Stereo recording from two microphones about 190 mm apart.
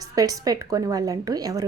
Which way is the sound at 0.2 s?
20° right (ahead or behind).